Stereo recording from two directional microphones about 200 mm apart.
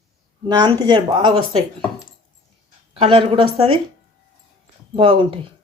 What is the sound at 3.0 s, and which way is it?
Speech, 25° right (ahead or behind).